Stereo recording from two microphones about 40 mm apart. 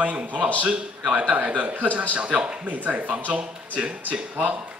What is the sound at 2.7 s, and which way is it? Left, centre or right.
A man's voice, right.